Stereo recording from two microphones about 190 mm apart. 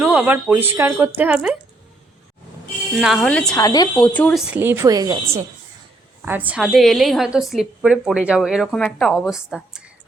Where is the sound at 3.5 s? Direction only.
20° left (ahead or behind).